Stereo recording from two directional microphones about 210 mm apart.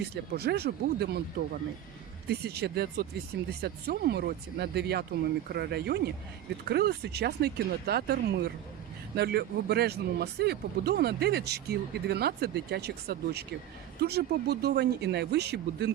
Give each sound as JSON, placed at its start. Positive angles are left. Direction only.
{"t": 0.0, "sound": "speech", "side_deg": -50}
{"t": 2.2, "sound": "speech", "side_deg": -50}